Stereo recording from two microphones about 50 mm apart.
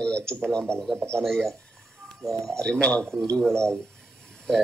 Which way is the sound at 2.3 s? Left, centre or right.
Right.